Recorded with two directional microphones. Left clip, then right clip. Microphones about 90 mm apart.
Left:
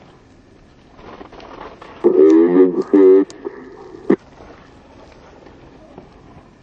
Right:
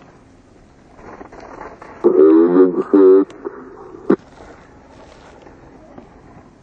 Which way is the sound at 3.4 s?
20° left (ahead or behind).